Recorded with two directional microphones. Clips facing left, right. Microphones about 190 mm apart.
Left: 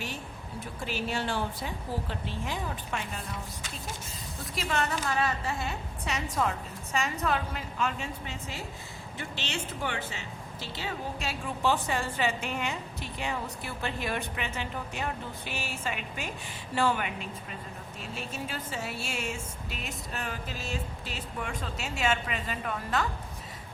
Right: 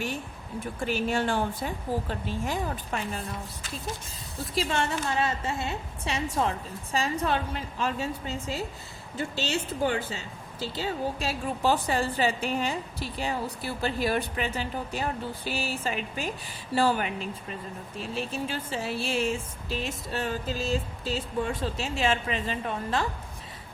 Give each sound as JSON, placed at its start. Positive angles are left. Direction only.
{"t": 0.6, "sound": "speech", "side_deg": -50}
{"t": 4.5, "sound": "a woman's voice", "side_deg": -30}
{"t": 9.8, "sound": "a woman's voice", "side_deg": -35}